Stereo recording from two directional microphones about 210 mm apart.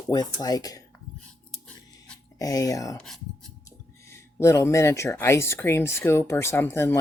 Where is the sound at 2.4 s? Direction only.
15° left (ahead or behind).